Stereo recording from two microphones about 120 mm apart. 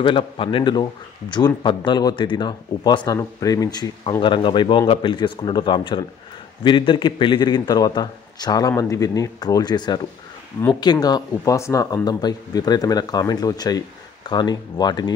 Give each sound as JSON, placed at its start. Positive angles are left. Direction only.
{"t": 0.0, "sound": "a man's voice", "side_deg": 45}
{"t": 4.2, "sound": "a man's voice", "side_deg": 40}